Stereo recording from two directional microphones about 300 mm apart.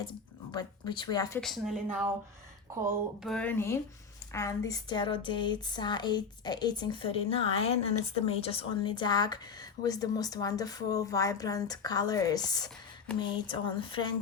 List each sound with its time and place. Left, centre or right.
0.1 s speech: centre
1.4 s a sound: centre
4.3 s a woman's voice: centre